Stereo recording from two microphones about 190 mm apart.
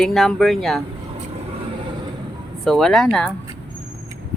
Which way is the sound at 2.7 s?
Centre (ahead or behind).